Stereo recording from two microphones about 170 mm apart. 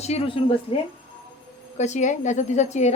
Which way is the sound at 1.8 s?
45° left (ahead or behind).